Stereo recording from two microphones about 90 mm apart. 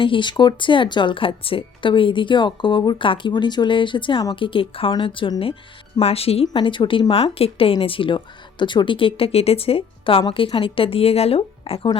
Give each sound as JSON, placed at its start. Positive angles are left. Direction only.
{"t": 0.0, "sound": "speech", "side_deg": 65}
{"t": 6.1, "sound": "speech", "side_deg": 90}
{"t": 7.1, "sound": "speech", "side_deg": 90}